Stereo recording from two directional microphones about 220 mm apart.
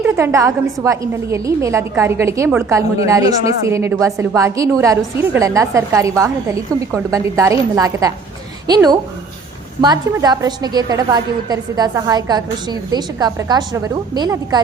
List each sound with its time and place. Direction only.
0.0 s a woman's voice: 10° right (ahead or behind)